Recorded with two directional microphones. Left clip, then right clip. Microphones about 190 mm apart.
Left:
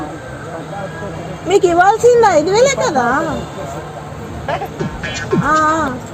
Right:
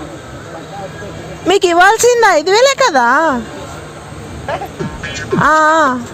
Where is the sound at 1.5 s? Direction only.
25° right (ahead or behind).